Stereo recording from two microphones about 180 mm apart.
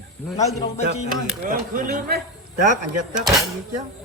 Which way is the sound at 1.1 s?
50° right (ahead or behind).